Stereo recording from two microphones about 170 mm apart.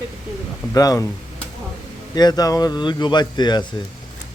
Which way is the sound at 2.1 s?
25° left (ahead or behind).